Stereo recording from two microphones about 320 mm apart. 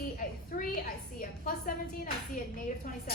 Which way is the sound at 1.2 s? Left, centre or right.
Left.